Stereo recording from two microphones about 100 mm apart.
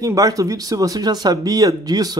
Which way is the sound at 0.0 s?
35° right (ahead or behind).